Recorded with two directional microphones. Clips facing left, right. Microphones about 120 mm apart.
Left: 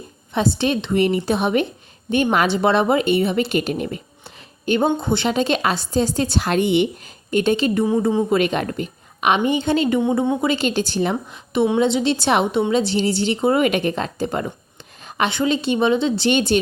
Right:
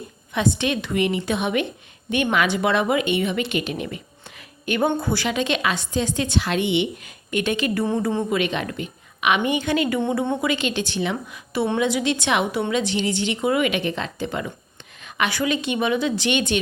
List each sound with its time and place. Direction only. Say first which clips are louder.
0.3 s a woman's voice: left 3 dB; 35° left (ahead or behind)
7.7 s a woman's voice: left 4 dB; 15° left (ahead or behind)
8.3 s a woman's voice: left 4 dB; 40° left (ahead or behind)
11.5 s a woman's voice: left 5 dB; 20° left (ahead or behind)
11.8 s a woman's voice: left 4 dB; 30° left (ahead or behind)
15.0 s a woman's voice: left 3 dB; 30° left (ahead or behind)